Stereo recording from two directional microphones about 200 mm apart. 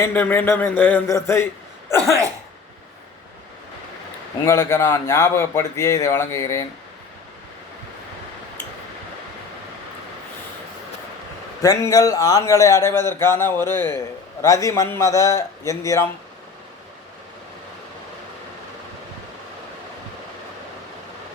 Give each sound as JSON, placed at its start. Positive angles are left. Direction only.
{"t": 0.0, "sound": "speech", "side_deg": 10}
{"t": 4.4, "sound": "speech", "side_deg": 15}
{"t": 11.6, "sound": "speech", "side_deg": 15}